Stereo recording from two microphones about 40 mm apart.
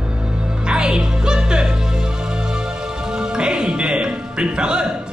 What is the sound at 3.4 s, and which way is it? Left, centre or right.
Music, right.